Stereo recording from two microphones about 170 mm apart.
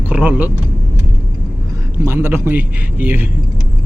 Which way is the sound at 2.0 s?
15° right (ahead or behind).